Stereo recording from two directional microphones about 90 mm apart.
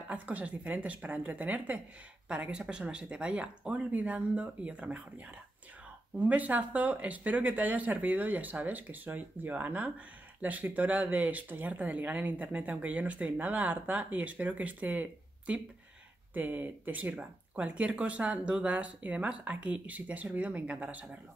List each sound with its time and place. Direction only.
0.1 s speech: 15° right (ahead or behind)